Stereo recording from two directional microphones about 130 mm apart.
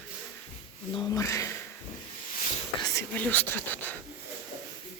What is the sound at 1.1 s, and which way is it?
Speech, 25° left (ahead or behind).